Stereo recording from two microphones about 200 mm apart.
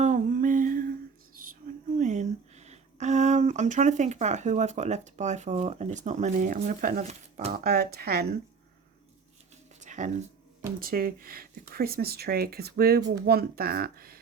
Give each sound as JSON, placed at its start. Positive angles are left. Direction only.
{"t": 0.0, "sound": "music", "side_deg": -40}
{"t": 2.0, "sound": "speech", "side_deg": -35}
{"t": 7.5, "sound": "speech", "side_deg": -50}
{"t": 9.8, "sound": "a sound", "side_deg": -35}
{"t": 10.8, "sound": "speech", "side_deg": -45}